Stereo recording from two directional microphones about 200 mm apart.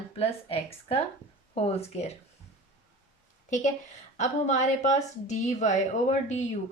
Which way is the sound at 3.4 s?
35° left (ahead or behind).